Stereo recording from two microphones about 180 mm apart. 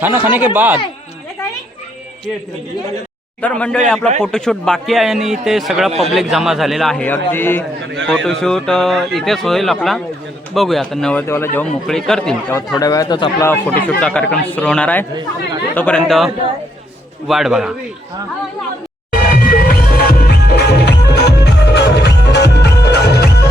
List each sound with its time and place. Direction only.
0.0 s speech: 10° right (ahead or behind)
3.4 s speech: 5° left (ahead or behind)
8.0 s speech: centre (ahead or behind)
12.7 s speech: 20° left (ahead or behind)
13.4 s speech: 10° left (ahead or behind)
19.2 s music: 55° left (ahead or behind)